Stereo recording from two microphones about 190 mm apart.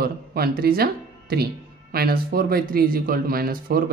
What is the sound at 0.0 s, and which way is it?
Speech, 55° right (ahead or behind).